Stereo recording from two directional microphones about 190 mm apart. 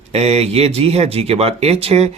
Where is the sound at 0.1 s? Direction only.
35° right (ahead or behind).